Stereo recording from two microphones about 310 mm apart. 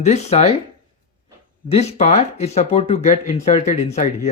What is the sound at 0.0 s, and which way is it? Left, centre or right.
Speech, left.